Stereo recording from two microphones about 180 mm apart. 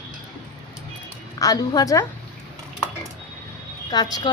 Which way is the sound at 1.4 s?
20° left (ahead or behind).